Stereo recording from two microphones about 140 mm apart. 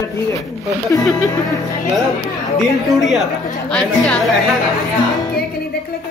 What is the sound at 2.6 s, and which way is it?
A woman's voice, centre (ahead or behind).